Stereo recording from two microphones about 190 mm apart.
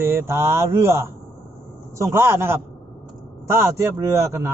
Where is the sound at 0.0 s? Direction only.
15° right (ahead or behind).